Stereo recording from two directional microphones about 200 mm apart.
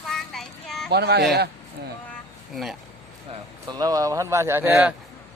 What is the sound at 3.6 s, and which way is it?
A man's voice, 20° right (ahead or behind).